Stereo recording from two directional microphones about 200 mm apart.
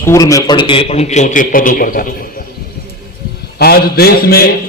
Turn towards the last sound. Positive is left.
turn(degrees=50)  # may be behind; listen again after turning